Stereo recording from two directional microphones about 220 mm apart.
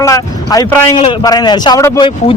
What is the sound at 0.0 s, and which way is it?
A man's voice, 15° left (ahead or behind).